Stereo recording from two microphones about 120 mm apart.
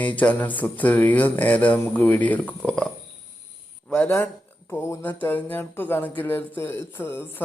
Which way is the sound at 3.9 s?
15° left (ahead or behind).